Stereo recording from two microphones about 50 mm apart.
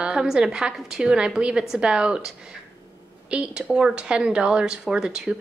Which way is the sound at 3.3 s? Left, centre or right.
Right.